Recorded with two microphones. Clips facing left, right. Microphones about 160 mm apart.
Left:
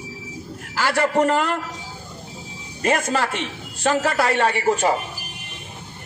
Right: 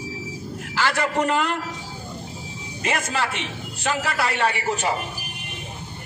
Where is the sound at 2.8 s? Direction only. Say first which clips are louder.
Left 4 dB; 45° left (ahead or behind).